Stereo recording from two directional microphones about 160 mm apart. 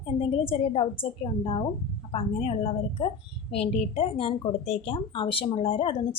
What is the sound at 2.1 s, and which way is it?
A woman's voice, 40° left (ahead or behind).